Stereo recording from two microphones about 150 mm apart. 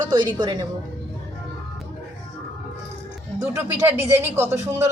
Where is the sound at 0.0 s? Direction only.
30° right (ahead or behind).